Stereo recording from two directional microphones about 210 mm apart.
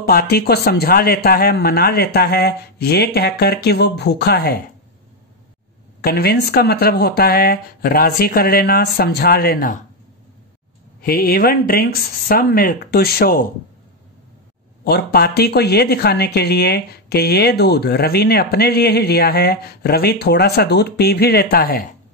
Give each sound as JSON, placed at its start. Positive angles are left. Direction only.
{"t": 0.0, "sound": "speech", "side_deg": 45}
{"t": 5.9, "sound": "speech", "side_deg": 45}
{"t": 11.0, "sound": "speech", "side_deg": 45}
{"t": 14.9, "sound": "speech", "side_deg": 45}